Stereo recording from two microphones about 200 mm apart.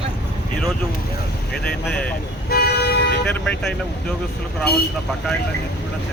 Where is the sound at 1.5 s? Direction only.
5° left (ahead or behind).